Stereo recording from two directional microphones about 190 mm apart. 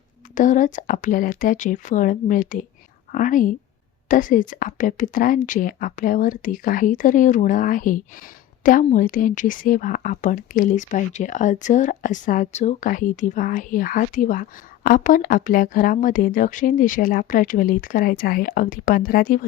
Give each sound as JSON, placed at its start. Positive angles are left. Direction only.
{"t": 0.3, "sound": "a woman's voice", "side_deg": 40}